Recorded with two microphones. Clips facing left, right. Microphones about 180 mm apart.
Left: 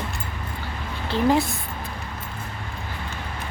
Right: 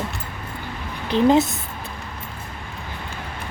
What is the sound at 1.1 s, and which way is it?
Speech, 20° right (ahead or behind).